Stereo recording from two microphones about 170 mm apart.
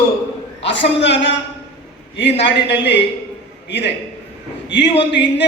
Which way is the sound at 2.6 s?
90° left.